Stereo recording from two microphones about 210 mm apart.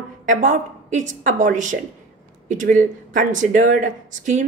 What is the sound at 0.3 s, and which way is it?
Speech, 35° right (ahead or behind).